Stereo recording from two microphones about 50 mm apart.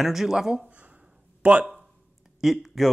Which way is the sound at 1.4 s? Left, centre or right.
Right.